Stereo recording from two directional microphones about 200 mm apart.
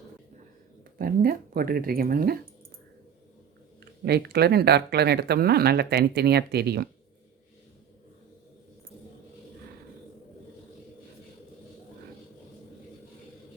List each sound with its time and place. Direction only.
0.9 s speech: 45° right (ahead or behind)
4.0 s speech: 55° right (ahead or behind)